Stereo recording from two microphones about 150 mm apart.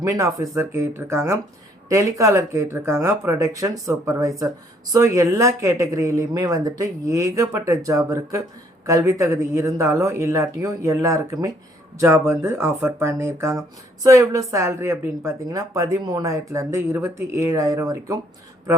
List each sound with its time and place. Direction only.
0.0 s speech: 20° right (ahead or behind)